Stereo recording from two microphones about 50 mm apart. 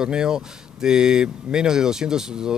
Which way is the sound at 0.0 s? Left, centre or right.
Centre.